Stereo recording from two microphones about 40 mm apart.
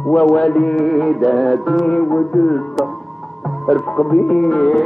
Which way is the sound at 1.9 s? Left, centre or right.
Centre.